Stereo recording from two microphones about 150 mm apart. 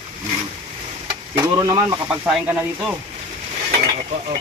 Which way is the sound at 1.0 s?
25° right (ahead or behind).